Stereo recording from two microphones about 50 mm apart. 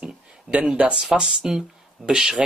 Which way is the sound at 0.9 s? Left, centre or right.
Centre.